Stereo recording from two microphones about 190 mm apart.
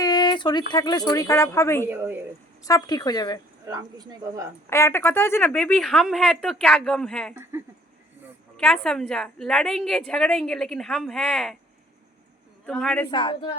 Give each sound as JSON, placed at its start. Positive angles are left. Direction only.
{"t": 0.0, "sound": "a sound", "side_deg": 20}
{"t": 0.7, "sound": "speech", "side_deg": 20}
{"t": 1.9, "sound": "a woman's voice", "side_deg": -10}
{"t": 2.6, "sound": "speech", "side_deg": 20}
{"t": 3.7, "sound": "speech", "side_deg": -20}
{"t": 4.7, "sound": "a woman's voice", "side_deg": 15}
{"t": 8.5, "sound": "a woman's voice", "side_deg": 5}
{"t": 12.6, "sound": "a woman's voice", "side_deg": 5}
{"t": 13.1, "sound": "speech", "side_deg": 25}